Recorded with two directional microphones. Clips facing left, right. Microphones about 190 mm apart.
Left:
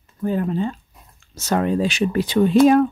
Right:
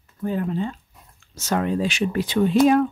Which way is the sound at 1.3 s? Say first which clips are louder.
Left 3 dB; 40° left (ahead or behind).